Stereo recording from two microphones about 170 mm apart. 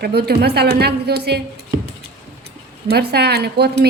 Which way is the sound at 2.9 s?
70° right (ahead or behind).